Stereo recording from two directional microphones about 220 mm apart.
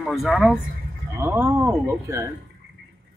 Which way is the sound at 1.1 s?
10° right (ahead or behind).